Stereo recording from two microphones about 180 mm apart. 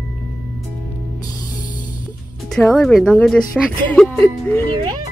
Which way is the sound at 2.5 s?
Centre (ahead or behind).